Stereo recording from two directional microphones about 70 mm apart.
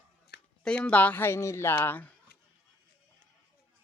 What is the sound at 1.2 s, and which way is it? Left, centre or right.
Speech, left.